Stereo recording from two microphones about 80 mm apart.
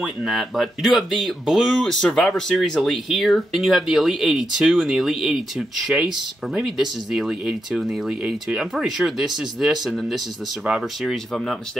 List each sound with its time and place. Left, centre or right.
0.0 s speech: centre